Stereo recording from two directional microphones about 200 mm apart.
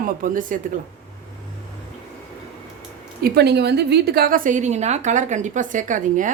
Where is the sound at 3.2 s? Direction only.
55° right (ahead or behind).